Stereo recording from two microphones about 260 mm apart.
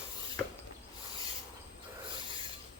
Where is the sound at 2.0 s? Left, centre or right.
Centre.